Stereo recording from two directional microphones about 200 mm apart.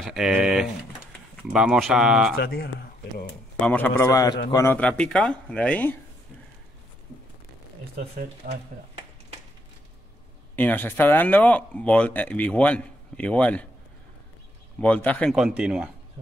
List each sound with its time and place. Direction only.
0.0 s speech: centre (ahead or behind)
2.3 s speech: 50° left (ahead or behind)
3.6 s a man's voice: 10° left (ahead or behind)
4.7 s speech: 5° left (ahead or behind)
8.4 s speech: 45° right (ahead or behind)
10.5 s speech: 10° left (ahead or behind)
14.8 s speech: 5° left (ahead or behind)